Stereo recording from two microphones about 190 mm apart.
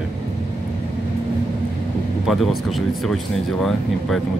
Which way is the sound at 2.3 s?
Centre (ahead or behind).